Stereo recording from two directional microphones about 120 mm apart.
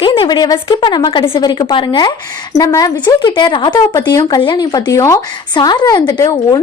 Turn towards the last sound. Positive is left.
turn(degrees=30)  # may be behind; listen again after turning